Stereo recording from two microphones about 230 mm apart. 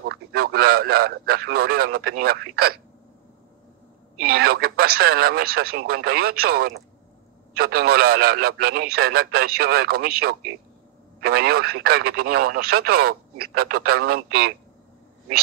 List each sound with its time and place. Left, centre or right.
0.0 s speech: right
4.2 s speech: right